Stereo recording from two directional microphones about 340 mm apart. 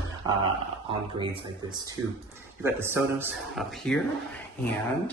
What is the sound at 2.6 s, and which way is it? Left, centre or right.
Speech, centre.